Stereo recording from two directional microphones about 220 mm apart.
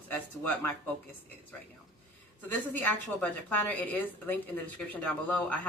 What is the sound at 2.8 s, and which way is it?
Speech, 5° left (ahead or behind).